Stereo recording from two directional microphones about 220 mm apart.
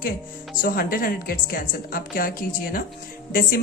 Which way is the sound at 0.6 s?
40° left (ahead or behind).